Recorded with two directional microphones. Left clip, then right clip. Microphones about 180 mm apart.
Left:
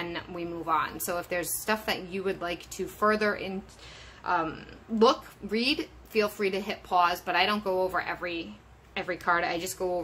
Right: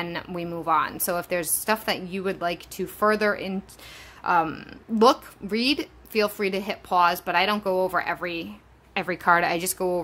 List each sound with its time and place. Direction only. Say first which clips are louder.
0.0 s a woman's voice: right 4 dB; 40° right (ahead or behind)